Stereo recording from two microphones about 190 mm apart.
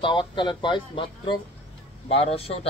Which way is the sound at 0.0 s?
25° left (ahead or behind).